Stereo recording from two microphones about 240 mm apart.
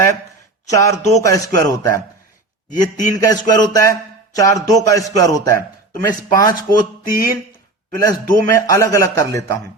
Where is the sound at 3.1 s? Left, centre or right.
Centre.